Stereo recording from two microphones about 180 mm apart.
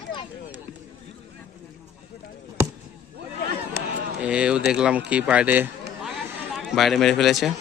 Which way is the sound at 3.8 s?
60° left (ahead or behind).